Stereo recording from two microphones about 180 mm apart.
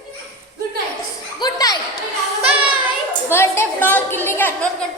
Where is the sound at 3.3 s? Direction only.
15° left (ahead or behind).